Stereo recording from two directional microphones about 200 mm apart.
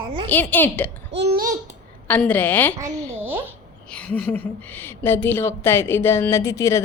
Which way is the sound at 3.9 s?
5° left (ahead or behind).